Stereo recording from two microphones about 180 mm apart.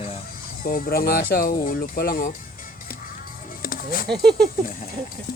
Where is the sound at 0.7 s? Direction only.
55° left (ahead or behind).